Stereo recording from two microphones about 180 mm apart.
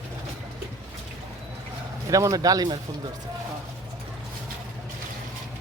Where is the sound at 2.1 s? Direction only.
20° right (ahead or behind).